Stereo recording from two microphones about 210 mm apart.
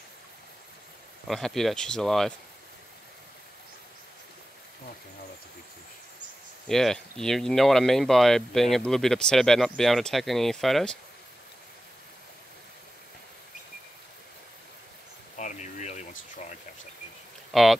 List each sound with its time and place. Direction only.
1.2 s speech: centre (ahead or behind)
6.7 s speech: centre (ahead or behind)
15.3 s a sound: 35° left (ahead or behind)
17.5 s speech: centre (ahead or behind)